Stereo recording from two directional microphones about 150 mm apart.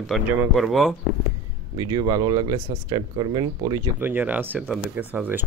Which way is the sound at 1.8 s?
25° right (ahead or behind).